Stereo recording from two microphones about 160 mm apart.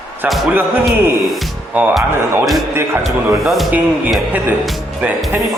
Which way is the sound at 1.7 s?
5° right (ahead or behind).